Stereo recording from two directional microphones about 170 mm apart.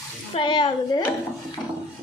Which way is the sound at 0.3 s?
30° left (ahead or behind).